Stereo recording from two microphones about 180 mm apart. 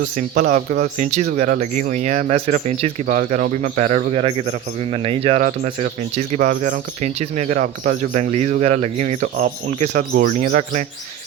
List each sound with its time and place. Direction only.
0.0 s speech: 45° right (ahead or behind)